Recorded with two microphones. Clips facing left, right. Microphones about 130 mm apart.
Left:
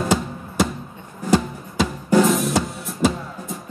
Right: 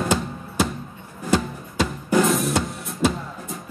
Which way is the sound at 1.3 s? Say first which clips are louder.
Left 3 dB; centre (ahead or behind).